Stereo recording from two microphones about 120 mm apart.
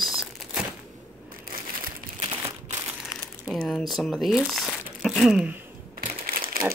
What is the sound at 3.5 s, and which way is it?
Speech, 5° left (ahead or behind).